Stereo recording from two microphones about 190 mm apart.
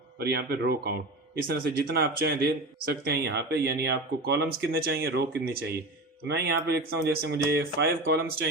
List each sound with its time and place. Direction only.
0.2 s speech: 55° right (ahead or behind)